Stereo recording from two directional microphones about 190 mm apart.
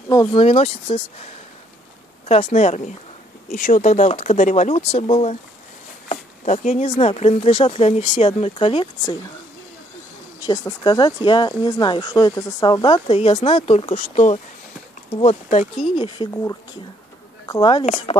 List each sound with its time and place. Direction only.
0.1 s speech: 20° left (ahead or behind)
0.4 s speech: 30° left (ahead or behind)
2.2 s speech: 35° left (ahead or behind)
3.4 s speech: 45° left (ahead or behind)
10.8 s speech: 25° left (ahead or behind)
16.0 s speech: 20° left (ahead or behind)
17.8 s speech: 40° left (ahead or behind)